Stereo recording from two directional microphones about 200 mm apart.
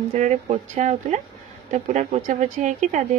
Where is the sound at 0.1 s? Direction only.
35° right (ahead or behind).